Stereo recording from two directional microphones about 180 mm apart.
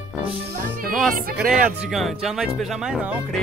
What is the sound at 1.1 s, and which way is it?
Speech, 55° right (ahead or behind).